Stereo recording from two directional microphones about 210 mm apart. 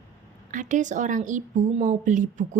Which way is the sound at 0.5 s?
35° right (ahead or behind).